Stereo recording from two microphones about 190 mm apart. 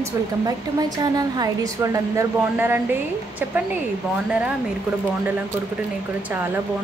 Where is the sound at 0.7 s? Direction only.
20° right (ahead or behind).